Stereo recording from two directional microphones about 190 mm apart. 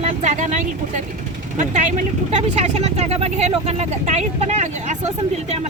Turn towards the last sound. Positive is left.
turn(degrees=-40)  # may be behind; listen again after turning